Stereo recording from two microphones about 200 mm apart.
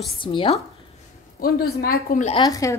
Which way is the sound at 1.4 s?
50° left (ahead or behind).